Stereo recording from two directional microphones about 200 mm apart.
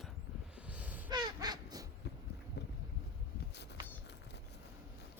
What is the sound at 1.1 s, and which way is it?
Crow, 20° right (ahead or behind).